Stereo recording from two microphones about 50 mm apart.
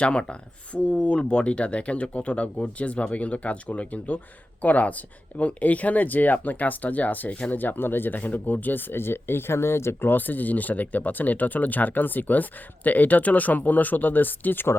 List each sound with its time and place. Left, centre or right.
0.0 s speech: left
10.1 s speech: left